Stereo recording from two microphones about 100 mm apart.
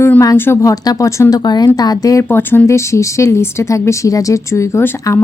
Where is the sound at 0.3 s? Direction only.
20° left (ahead or behind).